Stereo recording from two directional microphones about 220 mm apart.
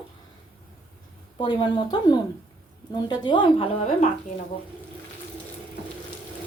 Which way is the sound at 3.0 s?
20° left (ahead or behind).